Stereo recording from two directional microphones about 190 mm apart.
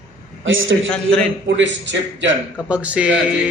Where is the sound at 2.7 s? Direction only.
5° right (ahead or behind).